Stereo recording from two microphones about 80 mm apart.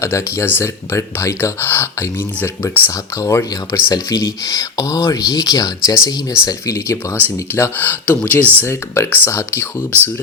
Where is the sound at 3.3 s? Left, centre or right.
Left.